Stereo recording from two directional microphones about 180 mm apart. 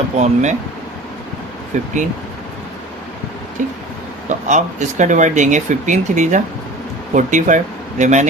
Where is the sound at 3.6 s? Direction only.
45° right (ahead or behind).